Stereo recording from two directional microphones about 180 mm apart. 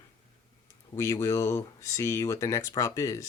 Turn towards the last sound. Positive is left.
turn(degrees=15)  # may be behind; listen again after turning